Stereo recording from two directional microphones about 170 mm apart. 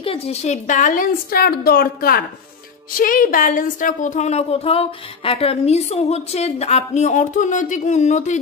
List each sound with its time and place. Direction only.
0.0 s speech: 35° left (ahead or behind)